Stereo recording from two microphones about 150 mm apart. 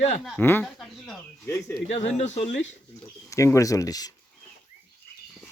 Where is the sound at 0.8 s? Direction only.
Centre (ahead or behind).